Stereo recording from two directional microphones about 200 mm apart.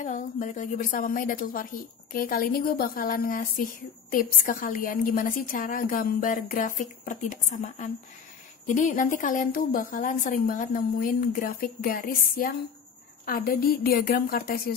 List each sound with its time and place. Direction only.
0.0 s a woman's voice: 40° left (ahead or behind)